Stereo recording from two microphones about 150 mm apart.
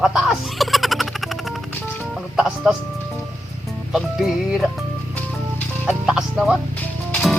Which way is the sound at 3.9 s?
Centre (ahead or behind).